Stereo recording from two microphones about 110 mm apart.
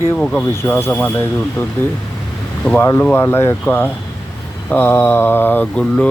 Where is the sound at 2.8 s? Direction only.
20° left (ahead or behind).